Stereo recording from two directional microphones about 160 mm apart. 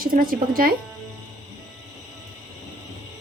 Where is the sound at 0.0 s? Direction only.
65° right (ahead or behind).